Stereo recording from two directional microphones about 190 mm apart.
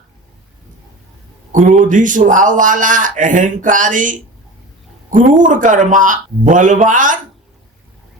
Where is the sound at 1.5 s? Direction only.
40° right (ahead or behind).